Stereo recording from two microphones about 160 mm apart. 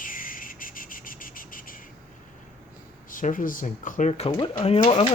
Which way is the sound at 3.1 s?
55° left (ahead or behind).